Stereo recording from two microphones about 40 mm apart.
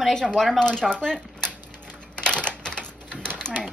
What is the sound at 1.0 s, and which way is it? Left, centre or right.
Typewriter, left.